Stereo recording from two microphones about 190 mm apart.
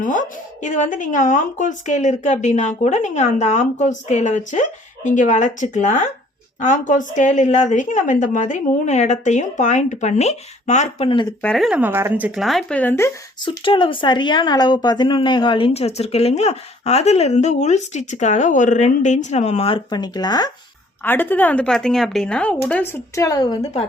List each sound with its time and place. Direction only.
0.0 s a woman's voice: 40° left (ahead or behind); by 11.3 s 25° left (ahead or behind)
11.4 s speech: centre (ahead or behind)
13.4 s a woman's voice: 25° left (ahead or behind)
21.0 s speech: 10° left (ahead or behind)